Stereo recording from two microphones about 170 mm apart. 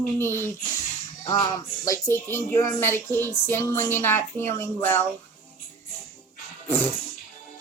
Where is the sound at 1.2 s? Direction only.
20° left (ahead or behind).